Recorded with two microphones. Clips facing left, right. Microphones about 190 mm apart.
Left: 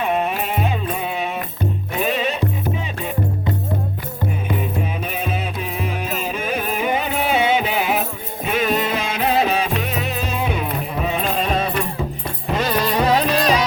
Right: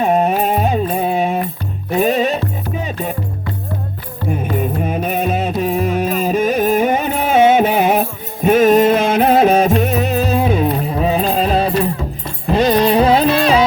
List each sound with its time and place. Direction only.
0.0 s music: 40° right (ahead or behind)
4.5 s music: 45° right (ahead or behind)